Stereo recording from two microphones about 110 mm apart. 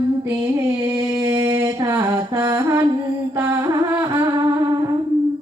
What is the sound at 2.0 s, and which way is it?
Music, 35° right (ahead or behind).